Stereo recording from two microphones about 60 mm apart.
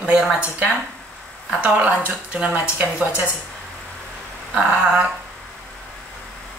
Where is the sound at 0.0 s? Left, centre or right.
Centre.